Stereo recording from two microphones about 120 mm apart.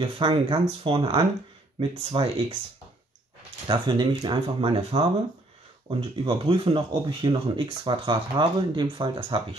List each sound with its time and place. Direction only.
0.0 s speech: 45° right (ahead or behind)
3.6 s speech: 40° right (ahead or behind)